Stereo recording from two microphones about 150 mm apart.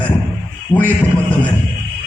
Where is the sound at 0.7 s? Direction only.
35° left (ahead or behind).